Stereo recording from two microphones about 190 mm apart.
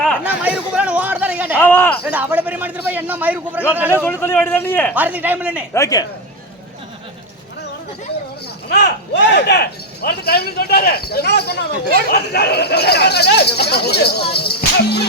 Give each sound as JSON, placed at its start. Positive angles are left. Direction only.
{"t": 0.3, "sound": "a sound", "side_deg": -10}
{"t": 1.5, "sound": "a man's voice", "side_deg": 10}
{"t": 2.0, "sound": "a man's voice", "side_deg": -10}
{"t": 4.0, "sound": "a man's voice", "side_deg": 10}
{"t": 4.9, "sound": "a man's voice", "side_deg": -10}
{"t": 5.7, "sound": "a man's voice", "side_deg": 15}
{"t": 8.7, "sound": "speech", "side_deg": 65}